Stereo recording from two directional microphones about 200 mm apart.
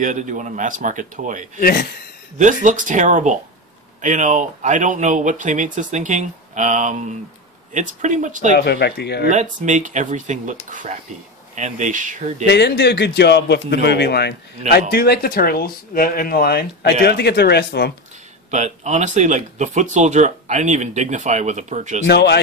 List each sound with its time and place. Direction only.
0.0 s speech: 40° right (ahead or behind)
1.6 s speech: 50° left (ahead or behind)
2.3 s speech: 40° right (ahead or behind)
8.5 s a man's voice: 55° left (ahead or behind)
9.3 s speech: 35° right (ahead or behind)
12.4 s a man's voice: 55° left (ahead or behind)
18.5 s speech: 35° right (ahead or behind)
22.0 s a man's voice: 55° left (ahead or behind)